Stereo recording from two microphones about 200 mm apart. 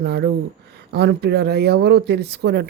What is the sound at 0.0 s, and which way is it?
Speech, 55° right (ahead or behind).